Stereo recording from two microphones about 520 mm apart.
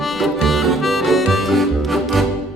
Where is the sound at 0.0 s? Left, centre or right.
Centre.